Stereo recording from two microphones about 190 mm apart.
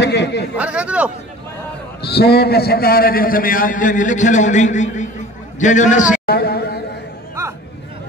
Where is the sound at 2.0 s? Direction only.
60° left (ahead or behind).